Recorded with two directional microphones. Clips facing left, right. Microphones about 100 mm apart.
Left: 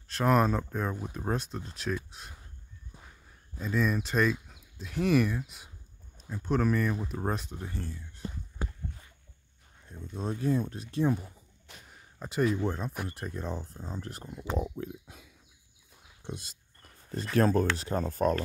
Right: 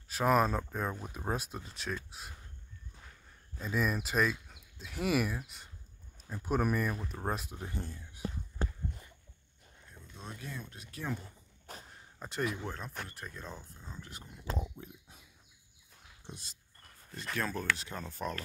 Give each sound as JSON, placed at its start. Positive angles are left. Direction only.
{"t": 0.1, "sound": "speech", "side_deg": -5}
{"t": 3.5, "sound": "speech", "side_deg": -5}
{"t": 7.1, "sound": "speech", "side_deg": 0}
{"t": 7.6, "sound": "speech", "side_deg": -20}
{"t": 10.1, "sound": "speech", "side_deg": 35}
{"t": 11.9, "sound": "a sound", "side_deg": 5}
{"t": 12.6, "sound": "speech", "side_deg": 15}
{"t": 13.7, "sound": "speech", "side_deg": 35}
{"t": 14.3, "sound": "speech", "side_deg": 80}
{"t": 17.4, "sound": "speech", "side_deg": 40}